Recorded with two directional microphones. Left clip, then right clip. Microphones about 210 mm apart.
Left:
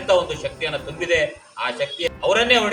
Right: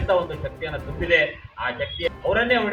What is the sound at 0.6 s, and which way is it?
Speech, 20° left (ahead or behind).